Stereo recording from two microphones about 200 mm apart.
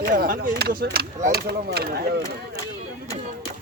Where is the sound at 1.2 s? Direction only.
50° right (ahead or behind).